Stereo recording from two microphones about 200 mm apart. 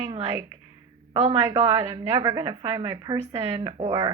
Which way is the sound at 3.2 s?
30° right (ahead or behind).